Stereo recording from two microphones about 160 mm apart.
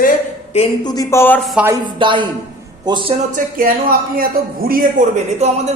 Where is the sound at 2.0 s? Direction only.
30° right (ahead or behind).